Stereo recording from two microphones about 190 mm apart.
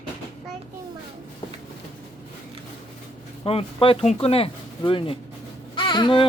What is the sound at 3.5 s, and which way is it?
Speech, 30° left (ahead or behind).